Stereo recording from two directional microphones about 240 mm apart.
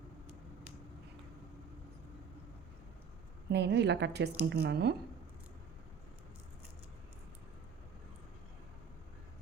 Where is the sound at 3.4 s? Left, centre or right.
Right.